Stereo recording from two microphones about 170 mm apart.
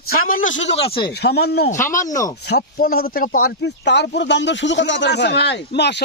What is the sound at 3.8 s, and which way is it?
A man's voice, 90° left.